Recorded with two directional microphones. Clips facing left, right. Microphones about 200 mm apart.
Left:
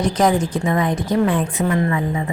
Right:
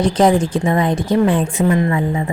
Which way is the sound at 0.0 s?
30° right (ahead or behind).